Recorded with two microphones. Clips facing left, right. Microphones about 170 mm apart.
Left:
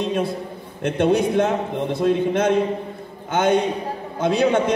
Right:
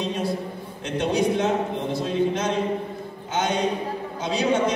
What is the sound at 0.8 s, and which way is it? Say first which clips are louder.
A man's voice: left 4 dB; 55° left (ahead or behind).